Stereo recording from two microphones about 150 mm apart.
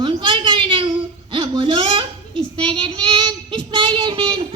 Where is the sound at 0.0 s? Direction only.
30° right (ahead or behind).